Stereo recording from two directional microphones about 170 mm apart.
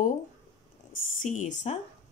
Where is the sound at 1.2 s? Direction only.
45° left (ahead or behind).